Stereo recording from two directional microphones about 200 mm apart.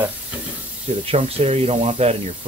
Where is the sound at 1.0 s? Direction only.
30° right (ahead or behind).